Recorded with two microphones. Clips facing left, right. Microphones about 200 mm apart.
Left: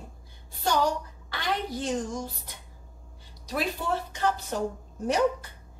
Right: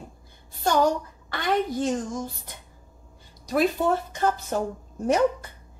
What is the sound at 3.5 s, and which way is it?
Speech, 50° right (ahead or behind).